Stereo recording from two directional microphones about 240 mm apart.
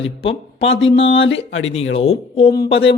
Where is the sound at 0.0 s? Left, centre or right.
Left.